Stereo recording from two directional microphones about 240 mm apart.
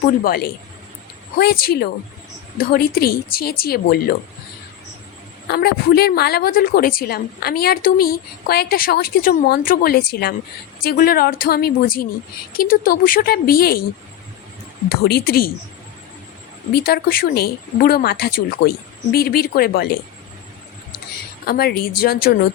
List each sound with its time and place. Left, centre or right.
0.3 s a woman's voice: left
5.5 s a woman's voice: left
14.8 s a woman's voice: left
16.8 s a woman's voice: left
21.4 s a woman's voice: left